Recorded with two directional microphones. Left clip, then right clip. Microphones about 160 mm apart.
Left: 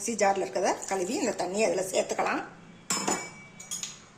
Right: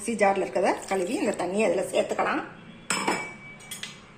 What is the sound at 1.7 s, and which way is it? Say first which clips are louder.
Speech: right 3 dB; 15° left (ahead or behind).